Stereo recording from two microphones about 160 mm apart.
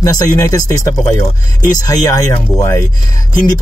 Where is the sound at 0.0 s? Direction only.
20° left (ahead or behind).